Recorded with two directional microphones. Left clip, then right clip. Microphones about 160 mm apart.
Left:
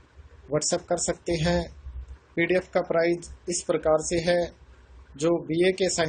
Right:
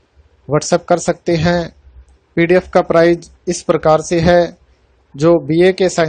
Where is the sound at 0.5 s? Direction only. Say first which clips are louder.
Right 12 dB; 60° right (ahead or behind).